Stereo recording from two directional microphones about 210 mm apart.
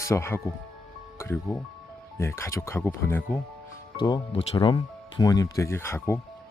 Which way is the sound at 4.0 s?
25° left (ahead or behind).